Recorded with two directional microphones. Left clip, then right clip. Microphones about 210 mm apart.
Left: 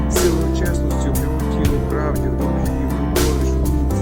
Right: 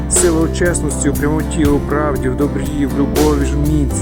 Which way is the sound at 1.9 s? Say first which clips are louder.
Right 6 dB; 30° right (ahead or behind).